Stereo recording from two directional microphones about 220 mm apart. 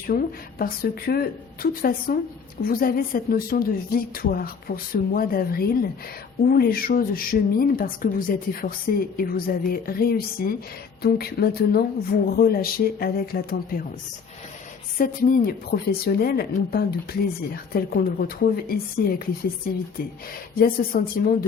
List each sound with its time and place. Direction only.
0.1 s speech: 40° left (ahead or behind)
14.9 s speech: 40° left (ahead or behind)